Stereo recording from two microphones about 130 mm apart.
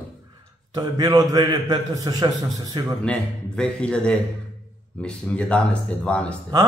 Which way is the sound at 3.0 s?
5° left (ahead or behind).